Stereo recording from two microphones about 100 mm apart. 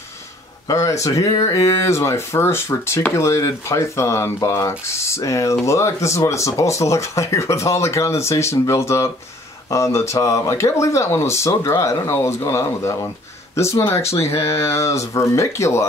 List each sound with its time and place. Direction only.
0.7 s speech: 30° left (ahead or behind)